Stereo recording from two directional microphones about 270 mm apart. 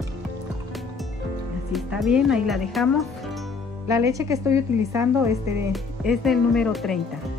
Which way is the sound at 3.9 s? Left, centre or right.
Centre.